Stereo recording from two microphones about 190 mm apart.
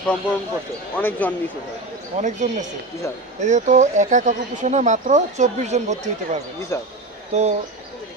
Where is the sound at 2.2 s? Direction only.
40° right (ahead or behind).